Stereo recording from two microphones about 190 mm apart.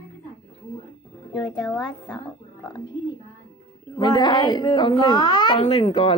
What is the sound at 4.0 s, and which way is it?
A woman's voice, 25° left (ahead or behind).